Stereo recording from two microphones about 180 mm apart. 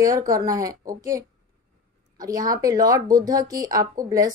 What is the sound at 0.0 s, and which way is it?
Speech, 20° right (ahead or behind).